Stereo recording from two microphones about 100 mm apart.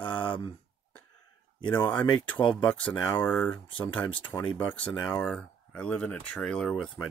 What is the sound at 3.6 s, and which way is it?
Speech, 50° left (ahead or behind).